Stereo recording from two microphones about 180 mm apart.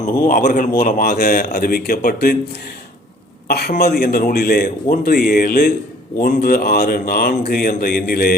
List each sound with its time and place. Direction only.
0.3 s speech: 45° left (ahead or behind)
3.4 s a man's voice: 60° left (ahead or behind)